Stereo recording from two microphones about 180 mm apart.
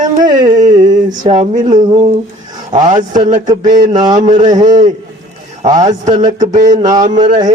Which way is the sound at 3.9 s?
25° right (ahead or behind).